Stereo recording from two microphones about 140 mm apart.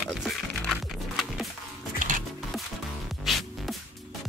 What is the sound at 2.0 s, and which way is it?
Music, 70° right (ahead or behind).